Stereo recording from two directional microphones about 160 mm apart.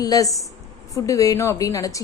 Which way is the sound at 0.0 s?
20° left (ahead or behind).